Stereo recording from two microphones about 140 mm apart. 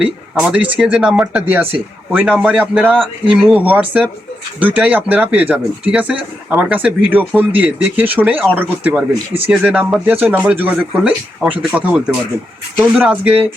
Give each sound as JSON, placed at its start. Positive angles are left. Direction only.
{"t": 0.0, "sound": "speech", "side_deg": -5}